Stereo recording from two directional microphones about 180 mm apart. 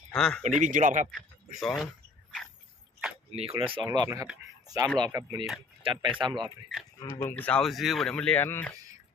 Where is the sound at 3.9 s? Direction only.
20° right (ahead or behind).